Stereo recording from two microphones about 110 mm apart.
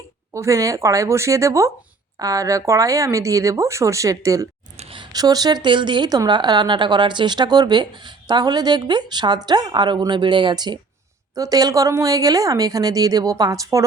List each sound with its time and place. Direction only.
0.3 s a woman's voice: 30° right (ahead or behind)